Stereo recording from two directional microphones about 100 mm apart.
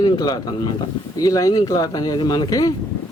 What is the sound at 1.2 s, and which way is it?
Speech, 35° left (ahead or behind).